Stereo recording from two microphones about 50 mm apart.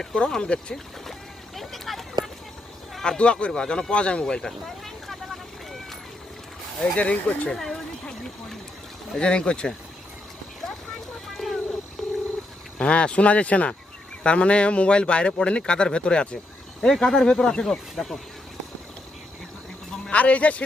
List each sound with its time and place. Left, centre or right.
0.0 s speech: centre
1.5 s a sound: centre
3.0 s speech: centre
6.9 s speech: left
7.5 s speech: centre
11.3 s a sound: centre
12.8 s speech: centre
19.9 s speech: left